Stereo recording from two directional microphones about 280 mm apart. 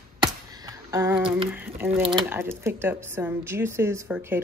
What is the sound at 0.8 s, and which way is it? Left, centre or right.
Speech, centre.